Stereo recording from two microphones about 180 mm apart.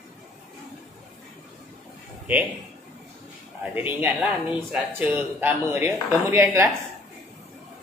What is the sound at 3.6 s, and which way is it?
Speech, 10° right (ahead or behind).